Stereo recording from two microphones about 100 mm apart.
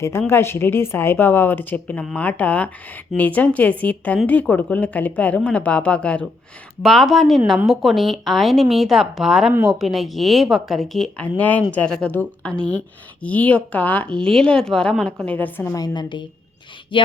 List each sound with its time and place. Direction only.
0.0 s a woman's voice: 25° left (ahead or behind); by 6.2 s 10° left (ahead or behind)
6.8 s speech: centre (ahead or behind); by 15.7 s 20° left (ahead or behind)
15.7 s a woman's voice: 40° left (ahead or behind); by 17.1 s 60° left (ahead or behind)